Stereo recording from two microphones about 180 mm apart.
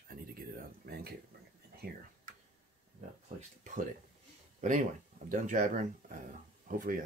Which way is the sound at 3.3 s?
45° right (ahead or behind).